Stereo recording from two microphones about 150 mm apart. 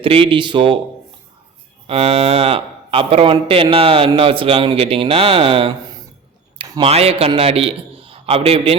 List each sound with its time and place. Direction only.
0.0 s speech: 35° right (ahead or behind)
1.9 s speech: 40° right (ahead or behind)
6.6 s a sound: 30° right (ahead or behind)
6.9 s a man's voice: 40° right (ahead or behind)